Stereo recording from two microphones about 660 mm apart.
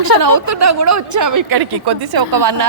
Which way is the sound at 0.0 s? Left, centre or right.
Right.